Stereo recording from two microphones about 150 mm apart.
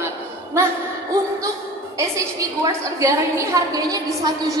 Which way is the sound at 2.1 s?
20° right (ahead or behind).